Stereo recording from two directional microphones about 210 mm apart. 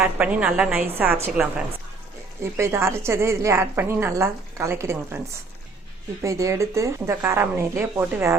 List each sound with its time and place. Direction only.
0.0 s a woman's voice: 5° right (ahead or behind)
6.2 s a woman's voice: 15° right (ahead or behind)